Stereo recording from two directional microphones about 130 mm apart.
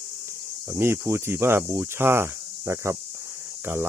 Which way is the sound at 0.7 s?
20° right (ahead or behind).